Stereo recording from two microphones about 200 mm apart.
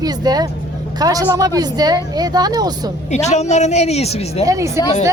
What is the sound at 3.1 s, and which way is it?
Speech, 35° left (ahead or behind).